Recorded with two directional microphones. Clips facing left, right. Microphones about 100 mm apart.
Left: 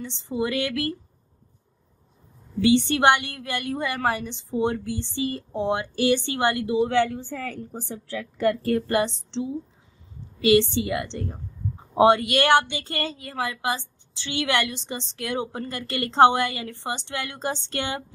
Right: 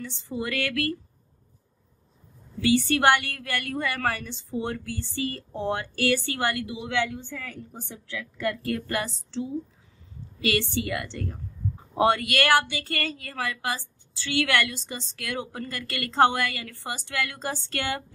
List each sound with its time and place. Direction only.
0.0 s a woman's voice: 20° left (ahead or behind)
2.6 s a woman's voice: 25° left (ahead or behind)